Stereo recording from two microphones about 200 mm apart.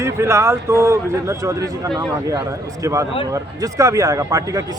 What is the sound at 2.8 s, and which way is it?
A man's voice, 15° right (ahead or behind).